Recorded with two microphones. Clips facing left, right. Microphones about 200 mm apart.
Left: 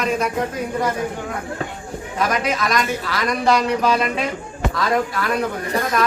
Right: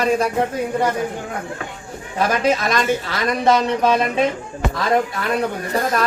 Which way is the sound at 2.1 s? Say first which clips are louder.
Right 3 dB; 30° right (ahead or behind).